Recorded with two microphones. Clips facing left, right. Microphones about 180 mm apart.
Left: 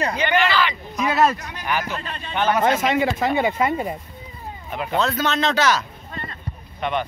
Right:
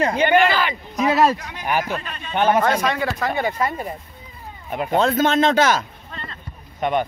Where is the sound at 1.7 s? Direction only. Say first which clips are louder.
Right 3 dB; 50° right (ahead or behind).